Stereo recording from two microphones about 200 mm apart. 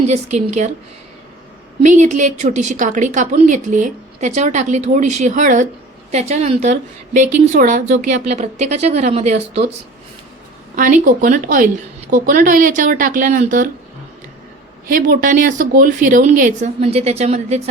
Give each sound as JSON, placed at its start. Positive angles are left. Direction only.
{"t": 0.1, "sound": "speech", "side_deg": -35}
{"t": 1.8, "sound": "speech", "side_deg": -35}
{"t": 10.8, "sound": "speech", "side_deg": -40}
{"t": 14.8, "sound": "speech", "side_deg": -45}